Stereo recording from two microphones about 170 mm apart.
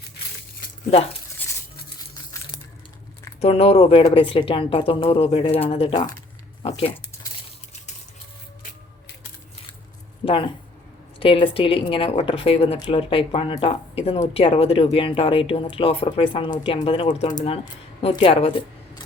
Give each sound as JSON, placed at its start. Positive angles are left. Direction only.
{"t": 3.4, "sound": "speech", "side_deg": 35}
{"t": 10.2, "sound": "speech", "side_deg": 30}
{"t": 18.1, "sound": "speech", "side_deg": 30}